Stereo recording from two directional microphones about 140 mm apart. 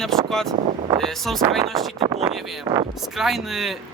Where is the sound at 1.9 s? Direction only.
35° right (ahead or behind).